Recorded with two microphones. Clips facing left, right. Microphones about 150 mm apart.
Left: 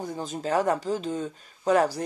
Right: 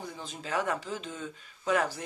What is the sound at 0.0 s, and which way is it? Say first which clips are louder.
Speech: left 9 dB; 45° left (ahead or behind).